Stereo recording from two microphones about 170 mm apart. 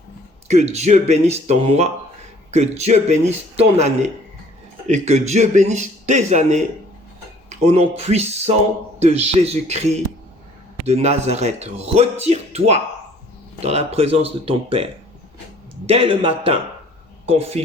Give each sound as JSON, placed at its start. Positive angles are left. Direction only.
{"t": 0.4, "sound": "a man's voice", "side_deg": -40}
{"t": 15.9, "sound": "speech", "side_deg": -35}